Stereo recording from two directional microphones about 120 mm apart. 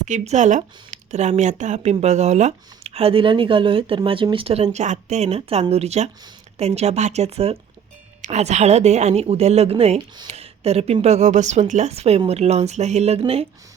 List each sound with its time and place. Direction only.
0.0 s speech: 85° right; by 7.6 s 60° right (ahead or behind)
8.2 s speech: 70° right (ahead or behind)
10.3 s a sound: 60° right (ahead or behind)
11.0 s a woman's voice: 70° right (ahead or behind)